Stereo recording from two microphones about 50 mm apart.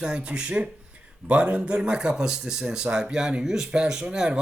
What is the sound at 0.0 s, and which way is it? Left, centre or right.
A man's voice, centre.